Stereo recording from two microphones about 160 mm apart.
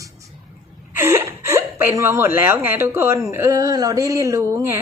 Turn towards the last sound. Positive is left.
turn(degrees=-20)  # may be behind; listen again after turning